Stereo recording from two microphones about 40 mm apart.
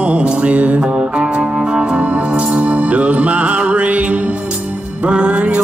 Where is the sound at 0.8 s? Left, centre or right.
Right.